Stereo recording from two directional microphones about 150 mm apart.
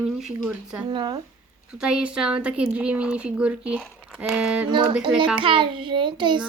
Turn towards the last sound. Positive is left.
turn(degrees=-30)  # may be behind; listen again after turning